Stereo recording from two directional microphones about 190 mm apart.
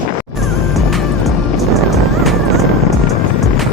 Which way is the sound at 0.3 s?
Centre (ahead or behind).